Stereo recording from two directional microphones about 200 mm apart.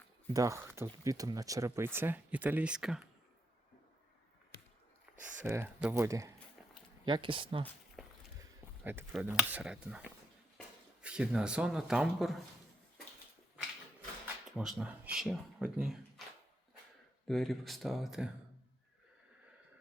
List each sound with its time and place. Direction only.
0.3 s speech: 15° right (ahead or behind)
5.4 s speech: 10° right (ahead or behind)
8.4 s speech: 10° right (ahead or behind)
14.5 s speech: centre (ahead or behind)
17.2 s speech: centre (ahead or behind)